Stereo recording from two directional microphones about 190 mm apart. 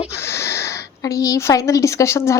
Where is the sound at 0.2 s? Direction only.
15° left (ahead or behind).